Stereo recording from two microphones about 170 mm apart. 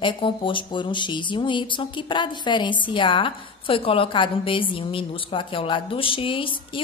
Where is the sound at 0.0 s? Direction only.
30° left (ahead or behind).